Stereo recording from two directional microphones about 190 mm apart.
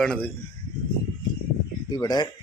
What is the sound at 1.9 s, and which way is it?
Speech, 20° left (ahead or behind).